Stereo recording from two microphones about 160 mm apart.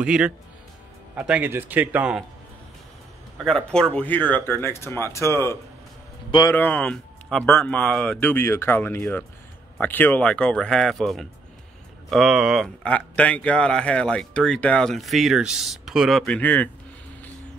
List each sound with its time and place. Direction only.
0.0 s a man's voice: 5° right (ahead or behind)
3.4 s speech: 5° left (ahead or behind)